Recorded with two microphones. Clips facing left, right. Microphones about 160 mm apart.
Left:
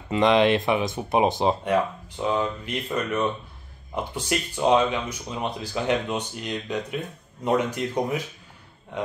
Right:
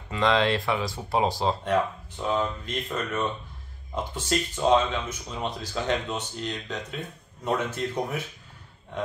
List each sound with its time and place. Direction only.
0.1 s speech: 20° left (ahead or behind)